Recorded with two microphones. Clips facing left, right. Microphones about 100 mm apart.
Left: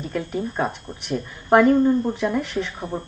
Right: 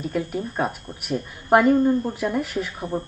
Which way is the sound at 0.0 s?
5° right (ahead or behind).